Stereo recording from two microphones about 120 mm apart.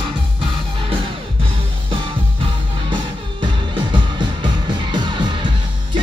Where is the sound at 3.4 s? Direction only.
40° right (ahead or behind).